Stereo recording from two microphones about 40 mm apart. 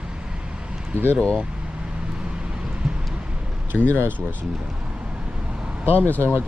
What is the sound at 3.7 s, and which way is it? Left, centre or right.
Speech, right.